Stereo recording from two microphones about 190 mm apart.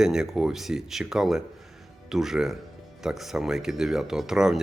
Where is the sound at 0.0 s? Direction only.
5° right (ahead or behind).